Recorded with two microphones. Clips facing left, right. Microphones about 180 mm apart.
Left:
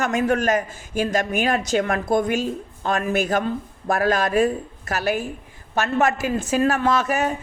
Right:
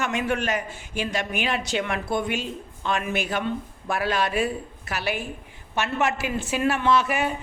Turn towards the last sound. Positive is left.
turn(degrees=45)  # may be behind; listen again after turning